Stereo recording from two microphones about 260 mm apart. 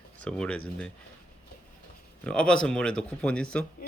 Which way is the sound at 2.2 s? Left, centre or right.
Centre.